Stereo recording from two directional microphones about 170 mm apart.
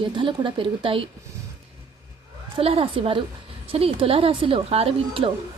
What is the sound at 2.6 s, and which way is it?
Speech, 35° right (ahead or behind).